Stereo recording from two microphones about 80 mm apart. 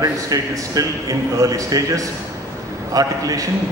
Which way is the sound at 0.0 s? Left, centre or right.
Right.